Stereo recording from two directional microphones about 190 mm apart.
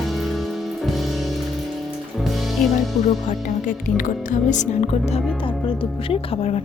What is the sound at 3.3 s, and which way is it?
Speech, 45° left (ahead or behind).